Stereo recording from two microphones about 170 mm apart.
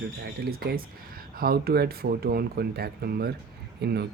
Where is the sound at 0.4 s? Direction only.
65° right (ahead or behind).